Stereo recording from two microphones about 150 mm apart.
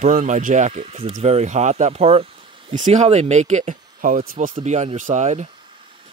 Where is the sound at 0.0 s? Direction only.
60° right (ahead or behind); by 2.2 s 40° right (ahead or behind).